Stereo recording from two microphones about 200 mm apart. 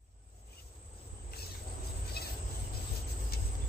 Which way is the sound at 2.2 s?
50° left (ahead or behind).